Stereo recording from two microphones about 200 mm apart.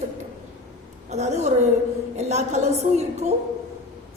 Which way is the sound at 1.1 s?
35° right (ahead or behind).